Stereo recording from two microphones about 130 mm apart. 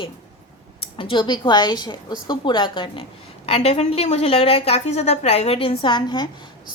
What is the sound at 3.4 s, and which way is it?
A woman's voice, 50° left (ahead or behind).